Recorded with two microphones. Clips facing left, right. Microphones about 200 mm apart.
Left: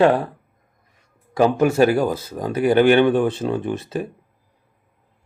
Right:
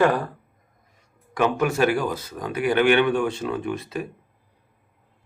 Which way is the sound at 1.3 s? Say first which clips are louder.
Left 5 dB; 30° left (ahead or behind).